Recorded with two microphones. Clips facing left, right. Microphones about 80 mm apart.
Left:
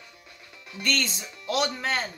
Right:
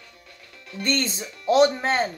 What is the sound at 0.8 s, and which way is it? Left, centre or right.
Speech, right.